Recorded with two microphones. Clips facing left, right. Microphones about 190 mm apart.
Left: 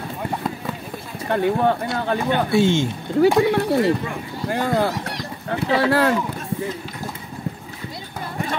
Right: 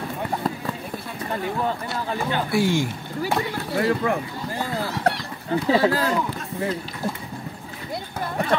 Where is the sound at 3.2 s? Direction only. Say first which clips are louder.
Left 10 dB; 70° left (ahead or behind).